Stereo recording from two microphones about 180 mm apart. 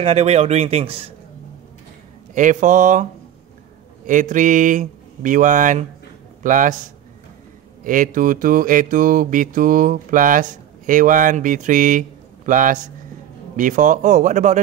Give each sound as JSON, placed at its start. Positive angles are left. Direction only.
{"t": 0.0, "sound": "a man's voice", "side_deg": -35}
{"t": 2.3, "sound": "mantra", "side_deg": -45}
{"t": 7.8, "sound": "mantra", "side_deg": -45}